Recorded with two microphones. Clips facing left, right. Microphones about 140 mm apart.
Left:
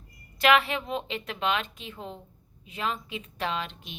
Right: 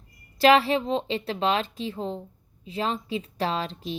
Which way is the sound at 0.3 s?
30° right (ahead or behind).